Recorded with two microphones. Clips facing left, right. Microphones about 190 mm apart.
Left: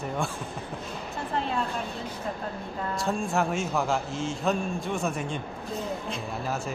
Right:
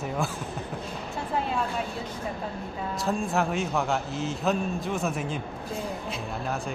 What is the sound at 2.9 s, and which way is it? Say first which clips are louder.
A man's voice: right 1 dB; centre (ahead or behind).